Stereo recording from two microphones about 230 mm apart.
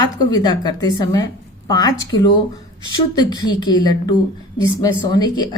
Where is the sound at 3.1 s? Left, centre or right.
Centre.